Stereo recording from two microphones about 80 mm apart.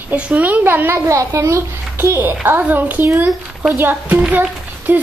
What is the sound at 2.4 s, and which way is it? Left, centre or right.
A woman's voice, right.